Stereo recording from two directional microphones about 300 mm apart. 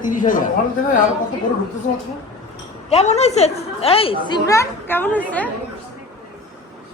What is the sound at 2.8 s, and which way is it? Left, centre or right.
A child's voice, left.